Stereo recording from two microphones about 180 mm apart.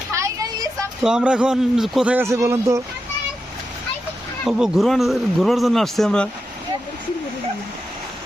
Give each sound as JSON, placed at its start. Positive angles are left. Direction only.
{"t": 0.1, "sound": "a sound", "side_deg": -15}
{"t": 1.0, "sound": "a man's voice", "side_deg": -5}
{"t": 4.4, "sound": "a man's voice", "side_deg": -5}